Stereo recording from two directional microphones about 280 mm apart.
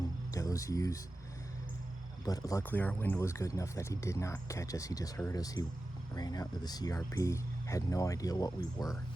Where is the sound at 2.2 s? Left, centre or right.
Centre.